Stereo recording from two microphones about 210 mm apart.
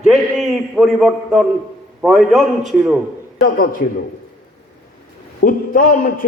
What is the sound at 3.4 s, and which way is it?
Speech, 45° left (ahead or behind).